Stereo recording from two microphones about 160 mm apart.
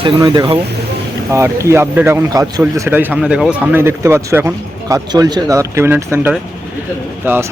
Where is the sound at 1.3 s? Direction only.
20° right (ahead or behind).